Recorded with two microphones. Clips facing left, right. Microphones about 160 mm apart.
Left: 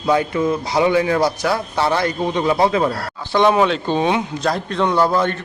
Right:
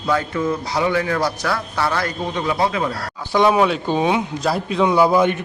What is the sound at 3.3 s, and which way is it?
A man's voice, 5° right (ahead or behind).